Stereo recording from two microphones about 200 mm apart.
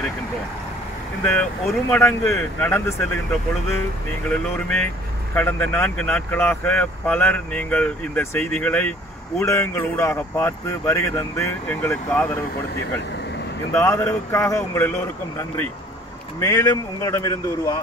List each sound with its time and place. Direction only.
1.2 s speech: 5° left (ahead or behind)
4.3 s speech: 5° left (ahead or behind)
13.7 s speech: 15° left (ahead or behind)